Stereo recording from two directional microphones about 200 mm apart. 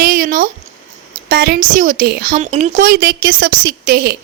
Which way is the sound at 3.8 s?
50° right (ahead or behind).